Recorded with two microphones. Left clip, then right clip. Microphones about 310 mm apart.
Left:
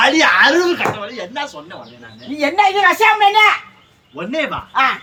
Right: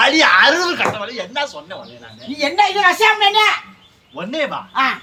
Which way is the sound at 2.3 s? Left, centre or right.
Centre.